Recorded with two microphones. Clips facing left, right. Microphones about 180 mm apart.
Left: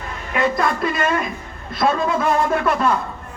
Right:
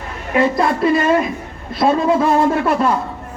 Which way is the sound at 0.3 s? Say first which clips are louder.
Right 4 dB; 30° right (ahead or behind).